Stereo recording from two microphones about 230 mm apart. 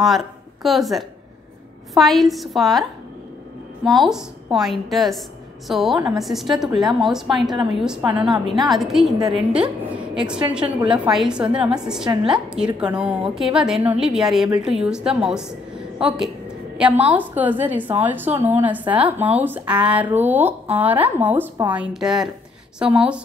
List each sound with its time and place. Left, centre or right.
0.0 s a woman's voice: centre
3.9 s a woman's voice: centre